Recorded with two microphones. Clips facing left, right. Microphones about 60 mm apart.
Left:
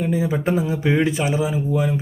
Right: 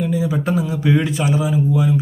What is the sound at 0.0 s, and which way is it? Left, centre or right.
A man's voice, left.